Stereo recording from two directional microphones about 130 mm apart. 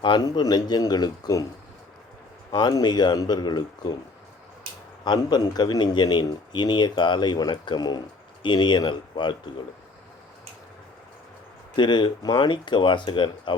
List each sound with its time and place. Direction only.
0.0 s a man's voice: 35° left (ahead or behind)
2.5 s a man's voice: 30° left (ahead or behind)
5.0 s a man's voice: 35° left (ahead or behind)
11.8 s a man's voice: 35° left (ahead or behind)